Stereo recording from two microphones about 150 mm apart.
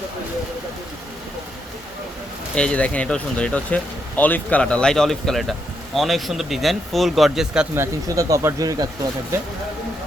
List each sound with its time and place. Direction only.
2.6 s speech: 10° left (ahead or behind)
7.8 s speech: 20° right (ahead or behind)